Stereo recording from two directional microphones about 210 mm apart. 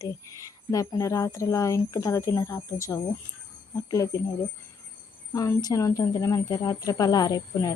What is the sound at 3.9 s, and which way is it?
Speech, 15° left (ahead or behind).